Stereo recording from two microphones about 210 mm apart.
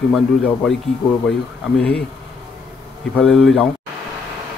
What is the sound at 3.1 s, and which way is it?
Speech, centre (ahead or behind).